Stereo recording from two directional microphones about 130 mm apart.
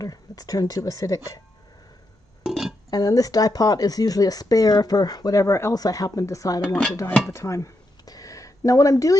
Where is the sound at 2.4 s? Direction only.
Centre (ahead or behind).